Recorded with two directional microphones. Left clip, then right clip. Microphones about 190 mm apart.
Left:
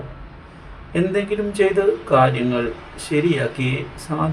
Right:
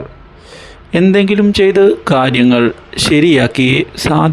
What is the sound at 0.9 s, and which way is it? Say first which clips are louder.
Speech: right 10 dB; 50° right (ahead or behind).